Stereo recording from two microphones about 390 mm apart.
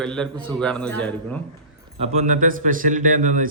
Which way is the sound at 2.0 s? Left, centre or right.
Centre.